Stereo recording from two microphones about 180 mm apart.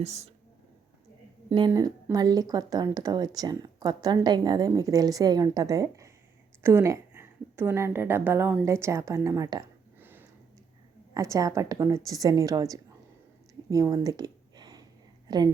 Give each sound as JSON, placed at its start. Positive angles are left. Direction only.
{"t": 0.0, "sound": "speech", "side_deg": -40}
{"t": 1.5, "sound": "a woman's voice", "side_deg": -25}
{"t": 13.7, "sound": "a sound", "side_deg": -20}
{"t": 15.3, "sound": "a woman's voice", "side_deg": -20}